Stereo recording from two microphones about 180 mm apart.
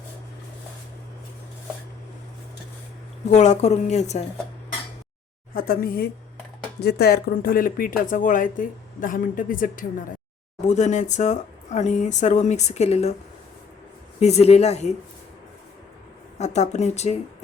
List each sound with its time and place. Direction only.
3.2 s speech: 40° left (ahead or behind)
5.5 s a woman's voice: 55° left (ahead or behind); by 13.1 s 40° left (ahead or behind)
14.2 s speech: 35° left (ahead or behind)
16.4 s speech: 40° left (ahead or behind)